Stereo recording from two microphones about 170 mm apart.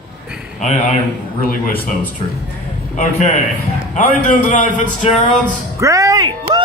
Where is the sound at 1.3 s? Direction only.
60° left (ahead or behind).